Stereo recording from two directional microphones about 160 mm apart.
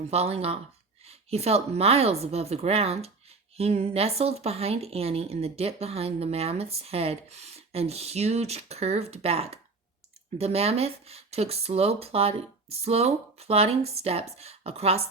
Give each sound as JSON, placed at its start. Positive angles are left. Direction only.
{"t": 0.1, "sound": "speech", "side_deg": -40}